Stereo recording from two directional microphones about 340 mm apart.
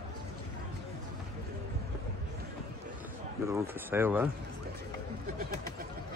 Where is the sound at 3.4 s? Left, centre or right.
Centre.